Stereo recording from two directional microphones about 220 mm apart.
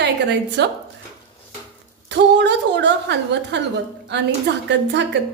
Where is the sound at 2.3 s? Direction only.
50° right (ahead or behind).